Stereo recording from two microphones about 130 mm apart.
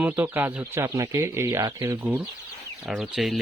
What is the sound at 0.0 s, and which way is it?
Speech, 15° right (ahead or behind).